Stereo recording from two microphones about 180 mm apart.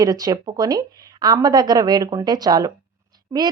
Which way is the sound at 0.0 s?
20° right (ahead or behind).